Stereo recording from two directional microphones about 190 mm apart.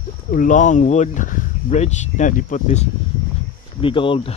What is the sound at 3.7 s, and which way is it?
Speech, 25° left (ahead or behind).